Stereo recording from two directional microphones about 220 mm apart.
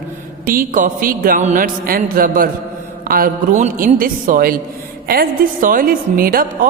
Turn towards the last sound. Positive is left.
turn(degrees=-40)  # may be behind; listen again after turning